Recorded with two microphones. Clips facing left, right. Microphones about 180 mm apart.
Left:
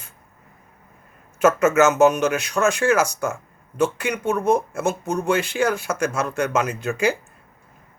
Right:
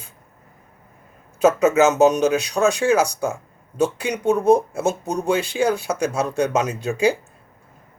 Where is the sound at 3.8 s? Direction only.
15° right (ahead or behind).